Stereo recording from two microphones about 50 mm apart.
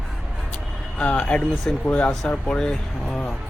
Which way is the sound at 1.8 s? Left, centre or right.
Left.